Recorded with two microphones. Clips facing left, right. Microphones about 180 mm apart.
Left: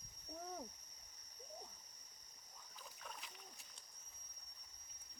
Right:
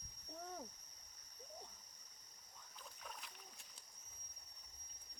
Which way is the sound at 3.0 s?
Centre (ahead or behind).